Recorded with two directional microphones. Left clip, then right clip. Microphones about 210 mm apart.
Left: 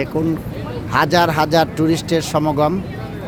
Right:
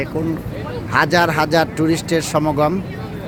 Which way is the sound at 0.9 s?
5° left (ahead or behind).